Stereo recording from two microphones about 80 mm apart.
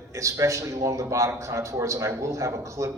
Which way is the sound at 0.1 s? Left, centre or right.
Right.